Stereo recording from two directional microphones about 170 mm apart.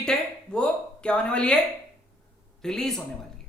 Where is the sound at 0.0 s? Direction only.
5° left (ahead or behind).